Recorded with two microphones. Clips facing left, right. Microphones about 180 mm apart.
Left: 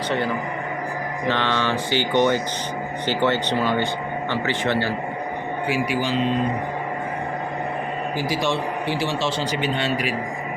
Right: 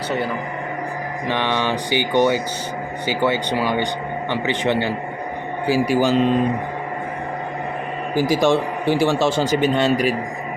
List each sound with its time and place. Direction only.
1.3 s speech: 15° right (ahead or behind)
5.6 s a man's voice: 40° right (ahead or behind)
8.1 s speech: 45° right (ahead or behind)